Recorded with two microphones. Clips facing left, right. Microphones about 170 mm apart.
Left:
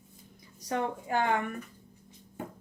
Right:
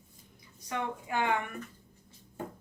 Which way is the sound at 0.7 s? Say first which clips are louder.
Left 4 dB; 40° left (ahead or behind).